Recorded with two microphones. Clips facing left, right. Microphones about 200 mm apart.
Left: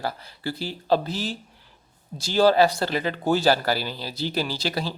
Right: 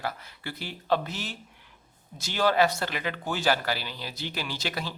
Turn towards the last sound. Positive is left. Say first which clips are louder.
# left 5 dB
turn(degrees=35)  # may be behind; listen again after turning